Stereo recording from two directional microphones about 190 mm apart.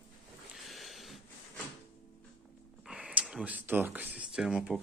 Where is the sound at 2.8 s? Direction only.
5° right (ahead or behind).